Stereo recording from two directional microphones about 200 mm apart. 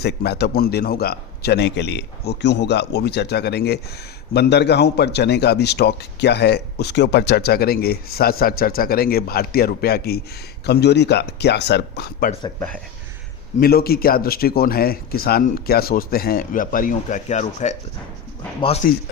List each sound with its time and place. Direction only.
0.0 s a man's voice: 55° left (ahead or behind)
12.5 s speech: 5° left (ahead or behind)
13.6 s a man's voice: 50° left (ahead or behind)
18.8 s a man's voice: 45° left (ahead or behind)